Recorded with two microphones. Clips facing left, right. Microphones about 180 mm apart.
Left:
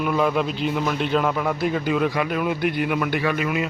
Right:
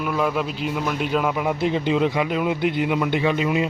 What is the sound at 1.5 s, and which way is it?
A man's voice, 25° right (ahead or behind).